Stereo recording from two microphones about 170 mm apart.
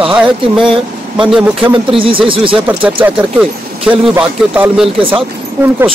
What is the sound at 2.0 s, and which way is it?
Speech, 30° right (ahead or behind).